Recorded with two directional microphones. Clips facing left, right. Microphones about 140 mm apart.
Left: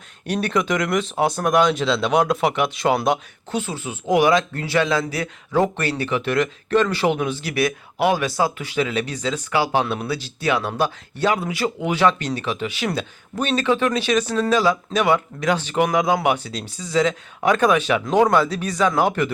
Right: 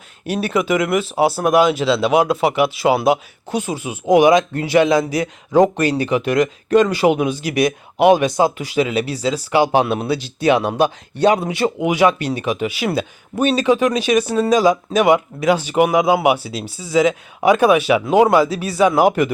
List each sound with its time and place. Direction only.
0.3 s speech: 5° right (ahead or behind); by 11.9 s 25° right (ahead or behind)
11.9 s speech: 10° right (ahead or behind)